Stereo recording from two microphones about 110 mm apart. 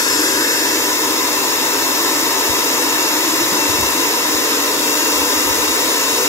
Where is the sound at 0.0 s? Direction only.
30° left (ahead or behind).